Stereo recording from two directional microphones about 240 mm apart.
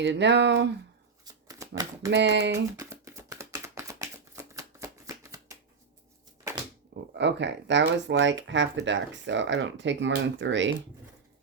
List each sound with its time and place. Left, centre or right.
0.0 s speech: right
1.2 s shuffling cards: centre
2.0 s speech: right
2.7 s a sound: centre
4.5 s shuffling cards: centre
6.9 s speech: right